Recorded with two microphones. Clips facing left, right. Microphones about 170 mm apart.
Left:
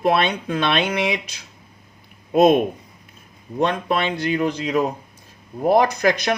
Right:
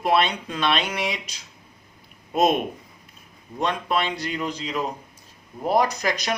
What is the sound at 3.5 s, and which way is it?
Speech, 55° left (ahead or behind).